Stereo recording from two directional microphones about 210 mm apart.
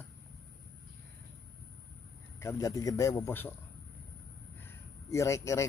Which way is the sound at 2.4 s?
15° left (ahead or behind).